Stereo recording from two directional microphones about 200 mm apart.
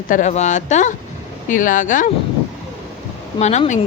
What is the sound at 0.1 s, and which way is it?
A woman's voice, 35° left (ahead or behind).